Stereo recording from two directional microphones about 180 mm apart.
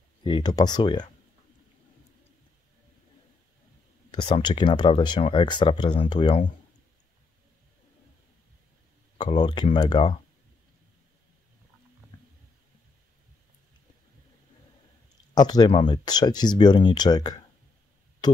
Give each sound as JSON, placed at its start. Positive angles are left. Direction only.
{"t": 0.2, "sound": "speech", "side_deg": 25}
{"t": 4.1, "sound": "speech", "side_deg": 25}
{"t": 9.2, "sound": "speech", "side_deg": 25}
{"t": 15.3, "sound": "speech", "side_deg": 20}